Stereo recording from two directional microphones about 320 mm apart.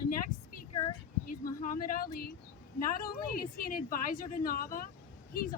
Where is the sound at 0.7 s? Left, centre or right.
Centre.